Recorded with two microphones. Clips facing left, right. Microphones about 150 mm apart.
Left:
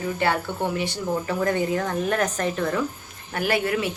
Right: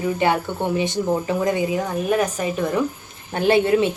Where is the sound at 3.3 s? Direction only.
25° right (ahead or behind).